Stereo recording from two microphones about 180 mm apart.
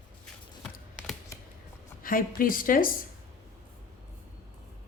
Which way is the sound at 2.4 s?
50° left (ahead or behind).